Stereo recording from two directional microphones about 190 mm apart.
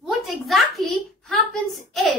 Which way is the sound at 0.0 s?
Centre (ahead or behind).